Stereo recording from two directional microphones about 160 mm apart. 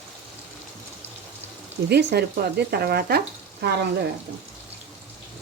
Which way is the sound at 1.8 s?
90° right.